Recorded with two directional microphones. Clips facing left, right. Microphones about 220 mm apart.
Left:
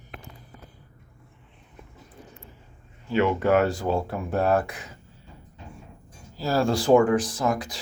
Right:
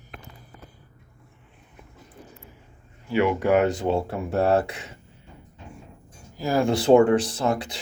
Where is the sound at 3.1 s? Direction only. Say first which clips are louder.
Right 1 dB; 15° right (ahead or behind).